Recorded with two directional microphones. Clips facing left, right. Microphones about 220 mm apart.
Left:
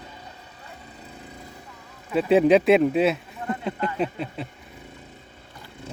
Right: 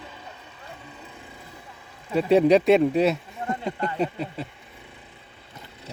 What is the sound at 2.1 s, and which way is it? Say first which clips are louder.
Speech: even; centre (ahead or behind).